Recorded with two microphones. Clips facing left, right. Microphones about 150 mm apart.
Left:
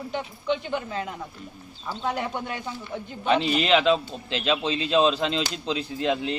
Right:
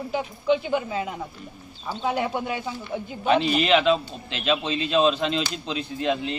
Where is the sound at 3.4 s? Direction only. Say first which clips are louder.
Left 1 dB; 30° left (ahead or behind).